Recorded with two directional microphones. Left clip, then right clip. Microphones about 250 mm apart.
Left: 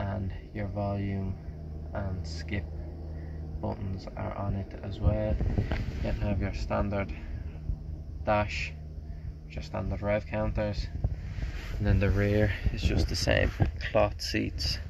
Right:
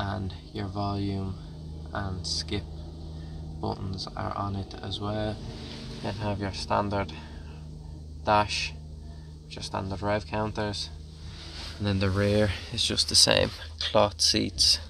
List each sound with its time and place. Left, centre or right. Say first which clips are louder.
0.0 s speech: right 3 dB; centre
3.6 s speech: right 4 dB; centre
8.3 s speech: right 4 dB; centre